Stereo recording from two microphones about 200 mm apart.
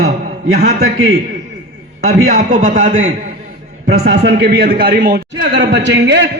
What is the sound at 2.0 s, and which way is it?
Speech, 45° right (ahead or behind).